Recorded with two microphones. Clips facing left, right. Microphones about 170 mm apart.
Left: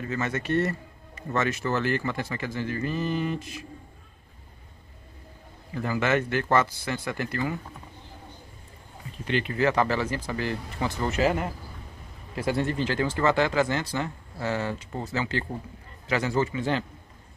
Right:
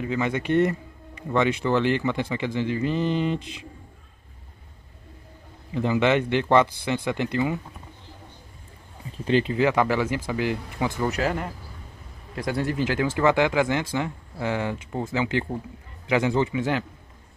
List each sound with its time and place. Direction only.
0.0 s speech: 15° right (ahead or behind)
5.8 s speech: 20° right (ahead or behind)
9.2 s speech: 30° right (ahead or behind)
9.5 s speech: 15° right (ahead or behind)
11.1 s speech: 5° left (ahead or behind)
12.7 s speech: 10° right (ahead or behind)